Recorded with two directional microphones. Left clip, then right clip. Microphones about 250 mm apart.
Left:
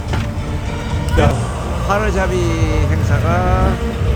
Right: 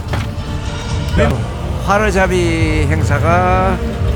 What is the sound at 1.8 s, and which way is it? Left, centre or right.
Speech, right.